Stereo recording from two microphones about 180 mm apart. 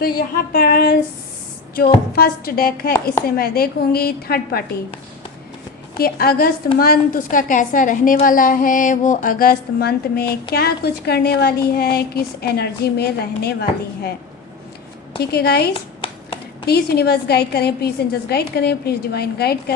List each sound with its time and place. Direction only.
0.2 s a woman's voice: 55° left (ahead or behind)
2.1 s a woman's voice: 55° left (ahead or behind)
6.0 s a woman's voice: 55° left (ahead or behind)
15.2 s a woman's voice: 60° left (ahead or behind)
15.7 s a sound: 30° left (ahead or behind)
16.6 s a woman's voice: 60° left (ahead or behind)